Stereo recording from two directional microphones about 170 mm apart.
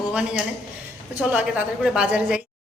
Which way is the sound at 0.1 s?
5° right (ahead or behind).